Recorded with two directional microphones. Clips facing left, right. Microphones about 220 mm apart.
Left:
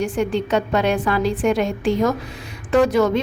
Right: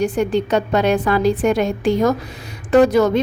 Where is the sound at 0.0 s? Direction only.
40° right (ahead or behind).